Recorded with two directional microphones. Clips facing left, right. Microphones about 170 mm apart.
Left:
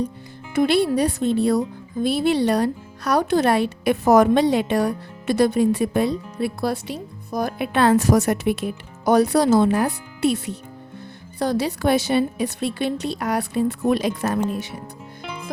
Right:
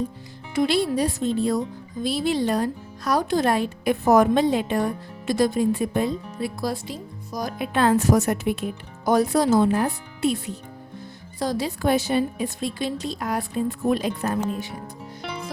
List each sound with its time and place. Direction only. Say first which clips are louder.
0.5 s speech: left 3 dB; 55° left (ahead or behind); by 14.3 s 85° left